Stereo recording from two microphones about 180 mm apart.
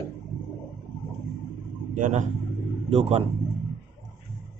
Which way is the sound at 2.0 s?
40° right (ahead or behind).